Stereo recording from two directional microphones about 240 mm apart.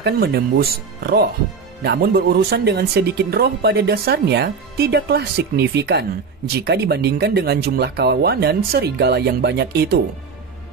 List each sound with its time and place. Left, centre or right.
0.0 s speech: right